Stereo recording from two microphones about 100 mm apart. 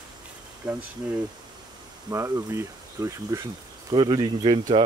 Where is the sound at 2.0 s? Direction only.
35° right (ahead or behind).